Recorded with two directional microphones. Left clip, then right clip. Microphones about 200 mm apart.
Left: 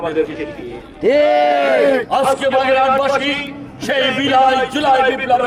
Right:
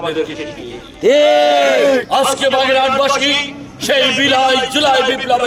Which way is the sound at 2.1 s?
Centre (ahead or behind).